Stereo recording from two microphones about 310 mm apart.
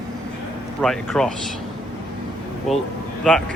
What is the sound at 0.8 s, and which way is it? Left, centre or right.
Speech, centre.